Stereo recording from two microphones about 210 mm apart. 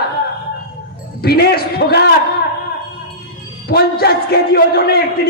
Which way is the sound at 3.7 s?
45° left (ahead or behind).